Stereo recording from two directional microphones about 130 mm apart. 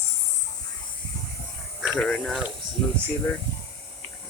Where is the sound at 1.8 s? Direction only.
5° left (ahead or behind).